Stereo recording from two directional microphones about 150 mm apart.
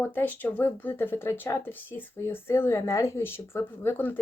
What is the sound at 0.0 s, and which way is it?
Speech, 15° left (ahead or behind).